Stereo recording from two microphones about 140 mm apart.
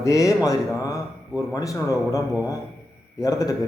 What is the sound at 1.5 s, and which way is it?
Speech, 25° left (ahead or behind).